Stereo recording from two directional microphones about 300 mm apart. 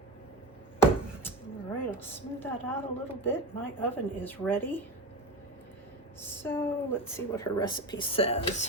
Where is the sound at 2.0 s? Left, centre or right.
Centre.